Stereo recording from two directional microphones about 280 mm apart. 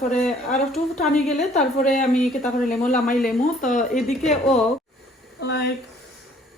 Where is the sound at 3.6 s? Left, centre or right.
Left.